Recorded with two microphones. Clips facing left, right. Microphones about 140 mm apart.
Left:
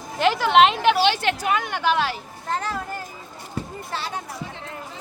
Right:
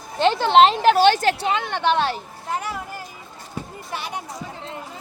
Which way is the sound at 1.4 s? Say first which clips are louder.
Even; 25° right (ahead or behind).